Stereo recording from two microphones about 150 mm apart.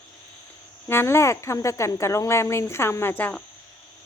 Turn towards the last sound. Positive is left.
turn(degrees=10)  # may be behind; listen again after turning